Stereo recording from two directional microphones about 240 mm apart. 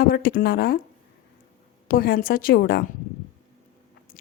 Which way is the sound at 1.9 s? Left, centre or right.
Left.